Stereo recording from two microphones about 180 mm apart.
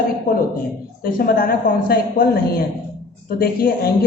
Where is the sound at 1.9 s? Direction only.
60° left (ahead or behind).